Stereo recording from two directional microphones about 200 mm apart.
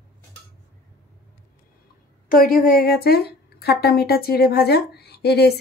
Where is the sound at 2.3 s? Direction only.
45° left (ahead or behind).